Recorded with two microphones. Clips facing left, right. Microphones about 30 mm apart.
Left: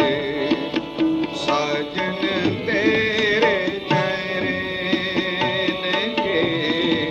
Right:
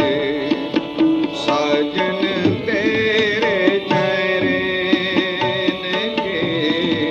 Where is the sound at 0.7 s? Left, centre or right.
Centre.